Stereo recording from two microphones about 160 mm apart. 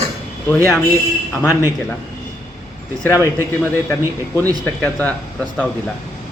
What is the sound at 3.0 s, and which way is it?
Speech, 15° left (ahead or behind).